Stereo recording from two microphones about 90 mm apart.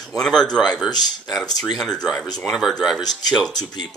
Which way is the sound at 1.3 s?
5° left (ahead or behind).